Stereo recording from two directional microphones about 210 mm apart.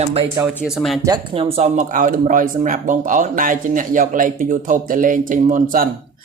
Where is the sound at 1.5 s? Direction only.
35° right (ahead or behind).